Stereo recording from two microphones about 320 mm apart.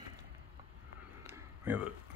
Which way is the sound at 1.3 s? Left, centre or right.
Centre.